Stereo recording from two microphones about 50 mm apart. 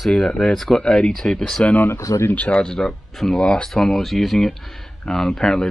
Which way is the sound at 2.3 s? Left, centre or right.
Left.